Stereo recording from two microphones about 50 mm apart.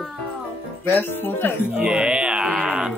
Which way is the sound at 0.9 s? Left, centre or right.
Left.